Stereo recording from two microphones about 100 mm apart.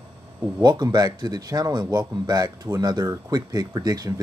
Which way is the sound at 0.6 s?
45° right (ahead or behind).